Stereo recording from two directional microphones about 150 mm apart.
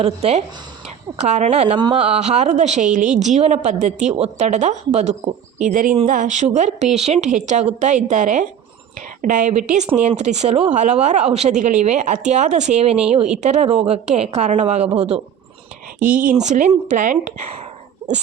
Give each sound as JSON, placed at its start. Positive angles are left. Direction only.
{"t": 0.0, "sound": "a woman's voice", "side_deg": -45}
{"t": 16.0, "sound": "speech", "side_deg": -60}